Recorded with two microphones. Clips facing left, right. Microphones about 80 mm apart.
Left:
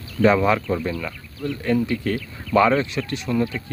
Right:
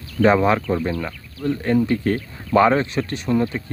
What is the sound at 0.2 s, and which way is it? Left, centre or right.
Speech, right.